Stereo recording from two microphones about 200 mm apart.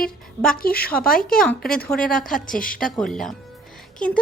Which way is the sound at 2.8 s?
Centre (ahead or behind).